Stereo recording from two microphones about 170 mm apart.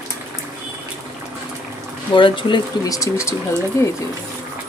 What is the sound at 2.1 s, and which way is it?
Speech, 30° left (ahead or behind).